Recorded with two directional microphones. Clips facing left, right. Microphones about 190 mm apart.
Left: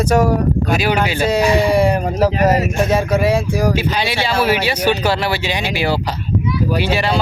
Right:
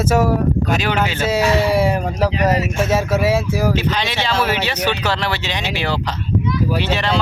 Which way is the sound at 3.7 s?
10° left (ahead or behind).